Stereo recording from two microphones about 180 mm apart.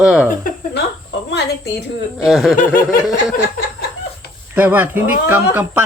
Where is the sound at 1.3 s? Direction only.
70° left (ahead or behind).